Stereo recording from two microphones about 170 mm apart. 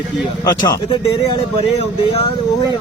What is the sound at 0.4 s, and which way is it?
Speech, 20° left (ahead or behind).